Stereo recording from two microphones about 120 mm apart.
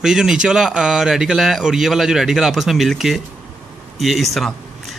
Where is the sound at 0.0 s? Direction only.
5° right (ahead or behind).